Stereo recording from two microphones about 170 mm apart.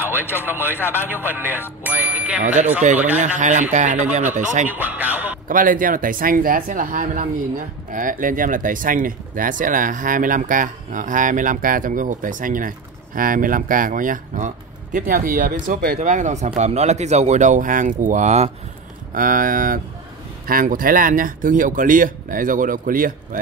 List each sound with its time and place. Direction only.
0.0 s speech: 15° left (ahead or behind)
1.3 s speech: 10° right (ahead or behind)
1.8 s bicycle bell: 10° right (ahead or behind)
2.4 s speech: 45° right (ahead or behind)
4.6 s speech: 10° right (ahead or behind)
5.5 s speech: 50° right (ahead or behind)
16.0 s speech: 45° right (ahead or behind)
19.1 s speech: 55° right (ahead or behind)